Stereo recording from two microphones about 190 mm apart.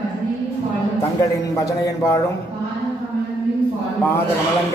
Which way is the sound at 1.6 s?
15° left (ahead or behind).